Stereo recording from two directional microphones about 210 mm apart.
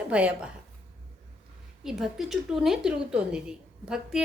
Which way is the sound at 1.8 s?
Centre (ahead or behind).